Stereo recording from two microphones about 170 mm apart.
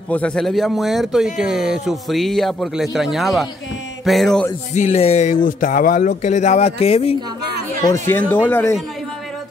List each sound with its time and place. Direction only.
0.1 s speech: 5° left (ahead or behind)
4.7 s speech: 40° left (ahead or behind)
8.1 s speech: 10° left (ahead or behind)